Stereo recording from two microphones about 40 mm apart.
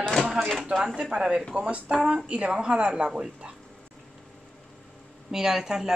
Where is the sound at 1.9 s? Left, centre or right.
Centre.